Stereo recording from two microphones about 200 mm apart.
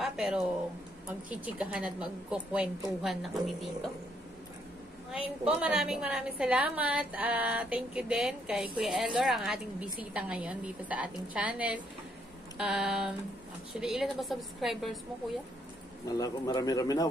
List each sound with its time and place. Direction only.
0.0 s a sound: 5° right (ahead or behind)
1.3 s a woman's voice: 5° right (ahead or behind)
5.2 s a woman's voice: 5° right (ahead or behind)
16.1 s speech: 20° left (ahead or behind)